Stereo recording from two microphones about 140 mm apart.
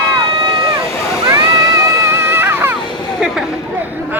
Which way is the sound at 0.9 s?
20° left (ahead or behind).